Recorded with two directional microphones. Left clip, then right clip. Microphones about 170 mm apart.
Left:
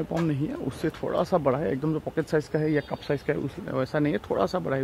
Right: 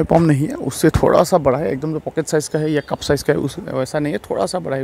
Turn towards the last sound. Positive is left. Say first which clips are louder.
# right 6 dB
turn(degrees=-20)  # may be behind; listen again after turning